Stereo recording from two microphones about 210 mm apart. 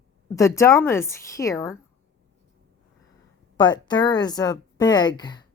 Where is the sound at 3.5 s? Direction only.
20° left (ahead or behind).